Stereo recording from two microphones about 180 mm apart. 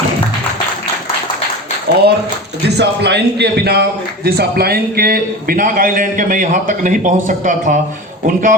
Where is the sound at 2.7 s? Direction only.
70° right (ahead or behind).